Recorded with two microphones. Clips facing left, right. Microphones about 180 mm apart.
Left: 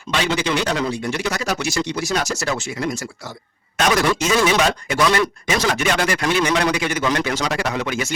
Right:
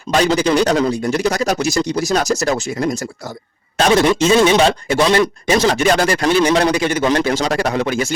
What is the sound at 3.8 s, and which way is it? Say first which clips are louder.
A man's voice: right 5 dB; 30° right (ahead or behind).